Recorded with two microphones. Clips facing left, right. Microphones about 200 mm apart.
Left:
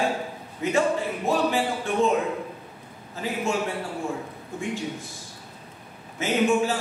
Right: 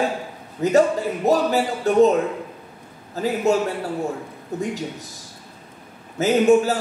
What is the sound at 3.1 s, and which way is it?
Speech, 40° right (ahead or behind).